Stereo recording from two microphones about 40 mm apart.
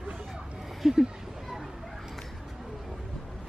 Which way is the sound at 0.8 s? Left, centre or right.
Centre.